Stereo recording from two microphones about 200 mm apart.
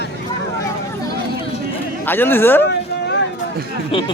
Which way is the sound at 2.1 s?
10° left (ahead or behind).